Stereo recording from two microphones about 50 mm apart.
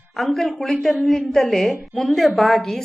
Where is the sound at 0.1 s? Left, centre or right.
Centre.